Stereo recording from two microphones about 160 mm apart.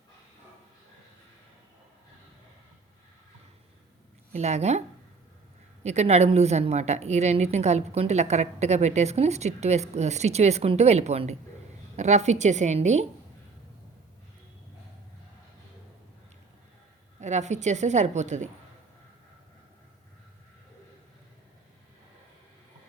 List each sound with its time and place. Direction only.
4.3 s a woman's voice: 45° right (ahead or behind)
5.8 s a woman's voice: 45° right (ahead or behind)
17.2 s a woman's voice: 45° right (ahead or behind)